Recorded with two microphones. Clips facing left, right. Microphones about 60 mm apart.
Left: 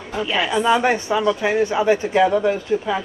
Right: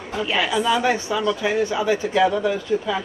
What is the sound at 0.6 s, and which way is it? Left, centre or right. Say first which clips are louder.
Speech: left 4 dB; left.